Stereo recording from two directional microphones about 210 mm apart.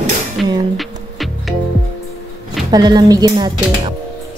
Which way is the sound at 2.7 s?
20° right (ahead or behind).